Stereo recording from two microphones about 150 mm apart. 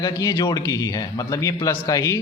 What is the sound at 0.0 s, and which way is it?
A man's voice, 25° left (ahead or behind).